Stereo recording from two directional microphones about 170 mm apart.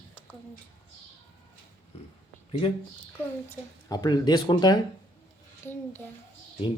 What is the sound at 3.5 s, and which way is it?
Speech, 25° left (ahead or behind).